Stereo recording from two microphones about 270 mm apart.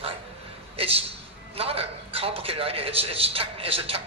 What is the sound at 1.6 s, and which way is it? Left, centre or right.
A man's voice, right.